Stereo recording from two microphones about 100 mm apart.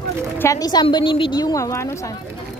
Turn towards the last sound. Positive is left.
turn(degrees=30)  # may be behind; listen again after turning